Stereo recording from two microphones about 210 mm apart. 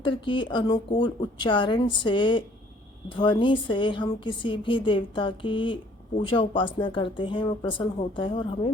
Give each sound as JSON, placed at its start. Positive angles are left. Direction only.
{"t": 0.0, "sound": "a woman's voice", "side_deg": 25}